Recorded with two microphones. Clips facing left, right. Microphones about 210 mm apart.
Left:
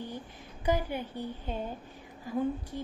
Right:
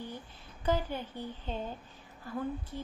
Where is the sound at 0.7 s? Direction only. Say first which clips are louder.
Left 2 dB; 15° left (ahead or behind).